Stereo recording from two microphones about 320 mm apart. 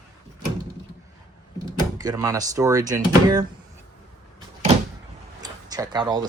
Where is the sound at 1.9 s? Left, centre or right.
Centre.